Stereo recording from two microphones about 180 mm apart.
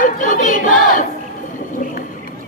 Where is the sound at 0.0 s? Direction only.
45° left (ahead or behind).